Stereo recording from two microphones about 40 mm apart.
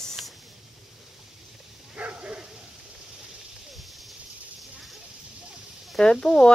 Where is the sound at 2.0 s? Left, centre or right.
Right.